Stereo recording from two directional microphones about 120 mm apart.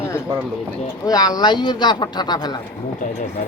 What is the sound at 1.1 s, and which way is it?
Speech, 30° left (ahead or behind).